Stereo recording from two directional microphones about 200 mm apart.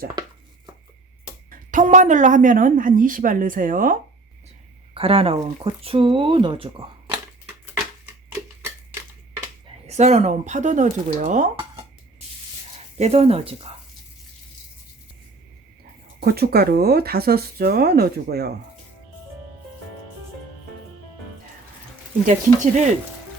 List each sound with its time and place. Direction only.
0.2 s a sound: 20° right (ahead or behind)
1.5 s speech: 40° right (ahead or behind)
4.9 s speech: 30° right (ahead or behind)
9.8 s speech: 35° right (ahead or behind)
13.0 s speech: 30° right (ahead or behind)
16.2 s speech: 50° right (ahead or behind)
22.3 s speech: 35° right (ahead or behind)